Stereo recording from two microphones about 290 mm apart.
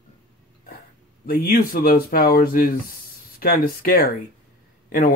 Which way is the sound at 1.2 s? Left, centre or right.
Left.